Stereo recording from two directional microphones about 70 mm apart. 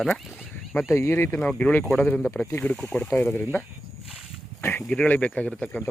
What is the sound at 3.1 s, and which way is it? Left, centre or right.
Speech, left.